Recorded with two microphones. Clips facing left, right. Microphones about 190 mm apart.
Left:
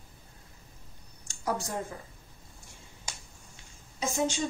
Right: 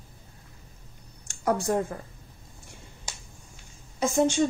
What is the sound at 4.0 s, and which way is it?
Speech, 60° right (ahead or behind).